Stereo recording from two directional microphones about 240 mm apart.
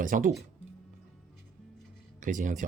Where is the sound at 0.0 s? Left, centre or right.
Right.